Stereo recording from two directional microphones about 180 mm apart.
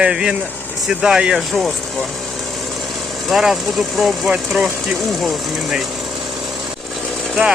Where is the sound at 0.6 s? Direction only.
10° left (ahead or behind).